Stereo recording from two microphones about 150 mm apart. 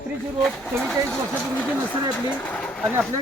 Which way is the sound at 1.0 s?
5° left (ahead or behind).